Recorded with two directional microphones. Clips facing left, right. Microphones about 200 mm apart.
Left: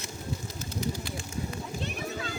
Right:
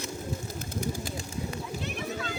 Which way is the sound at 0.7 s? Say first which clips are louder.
Even; 50° right (ahead or behind).